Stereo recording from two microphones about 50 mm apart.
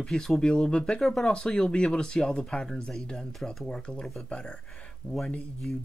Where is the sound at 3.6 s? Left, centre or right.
Centre.